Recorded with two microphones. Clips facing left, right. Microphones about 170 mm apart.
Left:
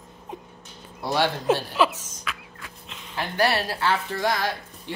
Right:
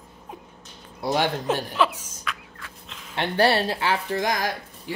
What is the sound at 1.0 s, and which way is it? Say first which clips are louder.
Speech: even; 15° right (ahead or behind).